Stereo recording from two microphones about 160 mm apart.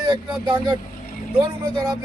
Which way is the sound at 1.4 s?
25° right (ahead or behind).